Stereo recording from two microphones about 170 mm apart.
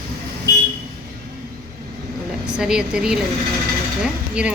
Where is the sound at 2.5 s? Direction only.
5° right (ahead or behind).